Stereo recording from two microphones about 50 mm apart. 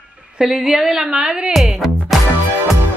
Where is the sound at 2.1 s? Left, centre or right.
Centre.